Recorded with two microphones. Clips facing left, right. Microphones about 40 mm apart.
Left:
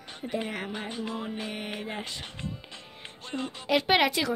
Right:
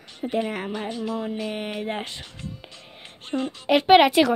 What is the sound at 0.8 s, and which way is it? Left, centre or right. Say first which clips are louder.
Music: right 6 dB; left.